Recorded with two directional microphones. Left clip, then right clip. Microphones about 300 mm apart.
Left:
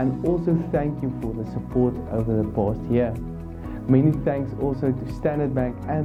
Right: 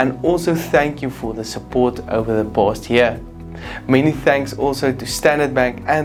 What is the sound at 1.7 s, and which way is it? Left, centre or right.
Speech, right.